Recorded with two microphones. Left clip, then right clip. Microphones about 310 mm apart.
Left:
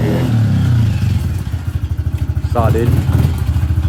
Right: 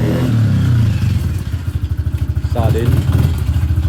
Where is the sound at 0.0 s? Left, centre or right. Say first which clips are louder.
Even; centre.